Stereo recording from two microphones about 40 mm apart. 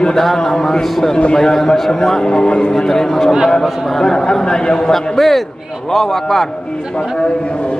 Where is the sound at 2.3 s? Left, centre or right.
Left.